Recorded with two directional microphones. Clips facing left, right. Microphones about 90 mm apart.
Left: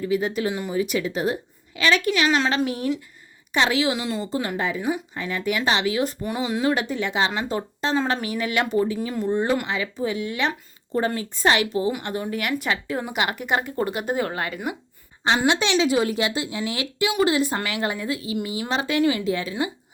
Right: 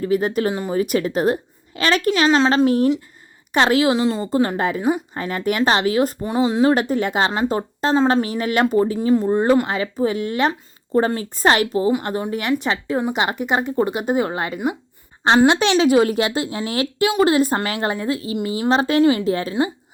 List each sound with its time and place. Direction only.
0.0 s a woman's voice: 50° right (ahead or behind)
3.5 s a woman's voice: 50° right (ahead or behind)
6.2 s a woman's voice: 30° right (ahead or behind)
12.0 s speech: 30° right (ahead or behind)
15.2 s a woman's voice: 50° right (ahead or behind)